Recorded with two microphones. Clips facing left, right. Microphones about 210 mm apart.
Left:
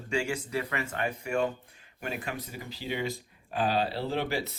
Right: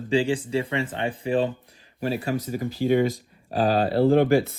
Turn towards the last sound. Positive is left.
turn(degrees=-50)  # may be behind; listen again after turning